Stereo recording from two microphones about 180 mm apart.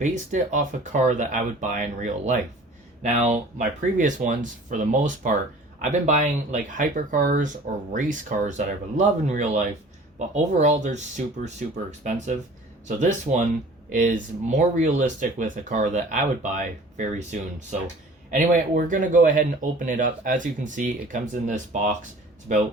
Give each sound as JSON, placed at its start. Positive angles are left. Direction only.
{"t": 0.0, "sound": "speech", "side_deg": -45}